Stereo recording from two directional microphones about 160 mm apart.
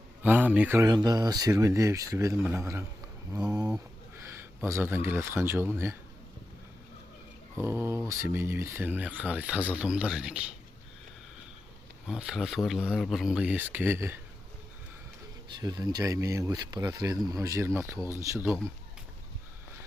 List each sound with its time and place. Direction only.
0.2 s speech: 10° right (ahead or behind)
7.6 s speech: 15° right (ahead or behind)
12.0 s speech: 5° right (ahead or behind)
15.6 s speech: 25° right (ahead or behind)